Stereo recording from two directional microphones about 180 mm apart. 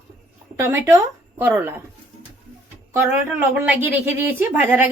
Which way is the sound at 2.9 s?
15° right (ahead or behind).